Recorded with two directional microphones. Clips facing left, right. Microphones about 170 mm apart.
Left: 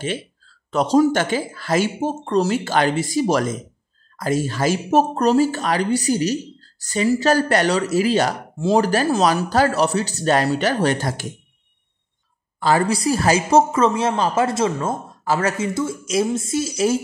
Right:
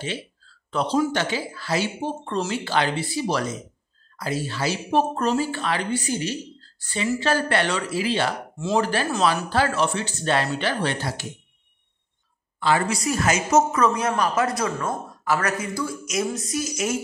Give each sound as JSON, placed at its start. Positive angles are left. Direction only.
{"t": 0.7, "sound": "speech", "side_deg": 45}
{"t": 12.5, "sound": "a woman's voice", "side_deg": 40}